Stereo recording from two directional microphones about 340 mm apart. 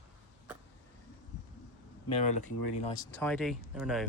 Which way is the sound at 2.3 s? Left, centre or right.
Left.